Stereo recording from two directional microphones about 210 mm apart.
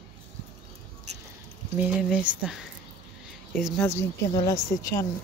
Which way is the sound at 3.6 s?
10° left (ahead or behind).